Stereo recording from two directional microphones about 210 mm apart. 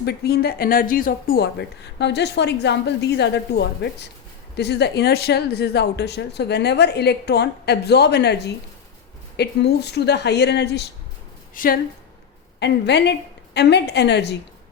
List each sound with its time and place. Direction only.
0.0 s speech: 50° left (ahead or behind)
11.5 s speech: 40° left (ahead or behind)
12.5 s a woman's voice: 55° left (ahead or behind)